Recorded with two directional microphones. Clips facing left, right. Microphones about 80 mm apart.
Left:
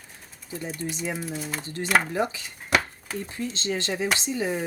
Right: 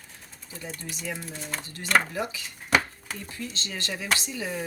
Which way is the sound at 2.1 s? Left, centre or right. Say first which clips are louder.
Left 5 dB; left.